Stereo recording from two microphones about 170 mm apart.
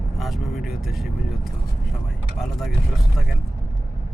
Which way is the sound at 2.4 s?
Centre (ahead or behind).